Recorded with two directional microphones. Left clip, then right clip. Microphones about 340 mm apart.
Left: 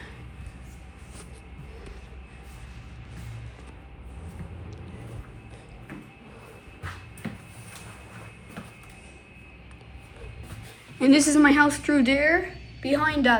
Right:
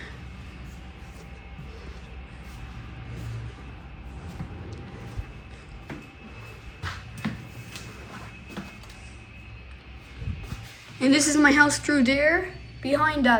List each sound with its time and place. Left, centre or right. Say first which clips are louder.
11.0 s speech: left 1 dB; centre